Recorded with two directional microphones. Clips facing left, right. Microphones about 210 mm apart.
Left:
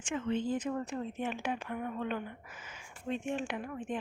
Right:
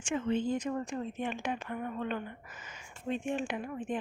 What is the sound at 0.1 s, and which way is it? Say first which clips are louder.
Speech: right 2 dB; 15° right (ahead or behind).